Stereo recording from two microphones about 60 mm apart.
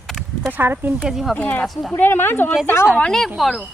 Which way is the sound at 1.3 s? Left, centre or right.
Left.